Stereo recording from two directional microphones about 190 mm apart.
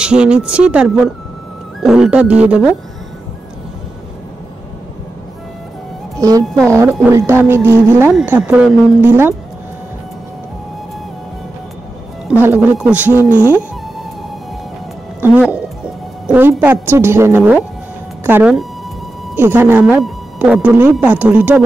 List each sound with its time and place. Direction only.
0.0 s speech: 5° right (ahead or behind)
6.1 s speech: 15° right (ahead or behind)
6.4 s speech: centre (ahead or behind)
7.1 s speech: 15° right (ahead or behind)
12.3 s speech: 10° right (ahead or behind)
15.1 s music: 10° right (ahead or behind)
16.3 s speech: 10° right (ahead or behind)